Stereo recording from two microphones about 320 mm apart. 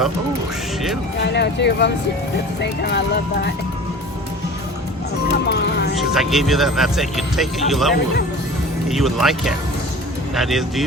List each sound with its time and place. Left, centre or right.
1.2 s speech: left
5.3 s speech: left
6.0 s speech: centre